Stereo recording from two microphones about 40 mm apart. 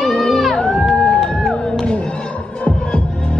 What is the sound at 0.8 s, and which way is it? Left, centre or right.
Run, centre.